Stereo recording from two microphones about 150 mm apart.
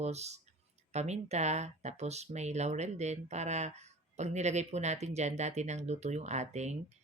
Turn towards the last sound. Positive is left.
turn(degrees=-50)  # may be behind; listen again after turning